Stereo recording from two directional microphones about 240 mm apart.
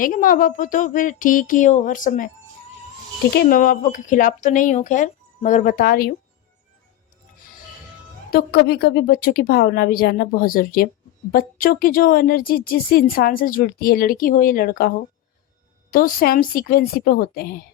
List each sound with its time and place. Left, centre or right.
0.0 s a woman's voice: left
3.3 s a woman's voice: left
8.3 s a woman's voice: left
15.9 s a woman's voice: left